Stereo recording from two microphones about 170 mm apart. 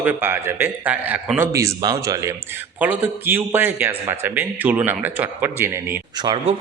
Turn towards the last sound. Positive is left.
turn(degrees=-35)  # may be behind; listen again after turning